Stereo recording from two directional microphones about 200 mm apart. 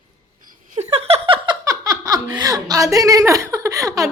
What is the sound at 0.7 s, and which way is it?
Laughter, 30° right (ahead or behind).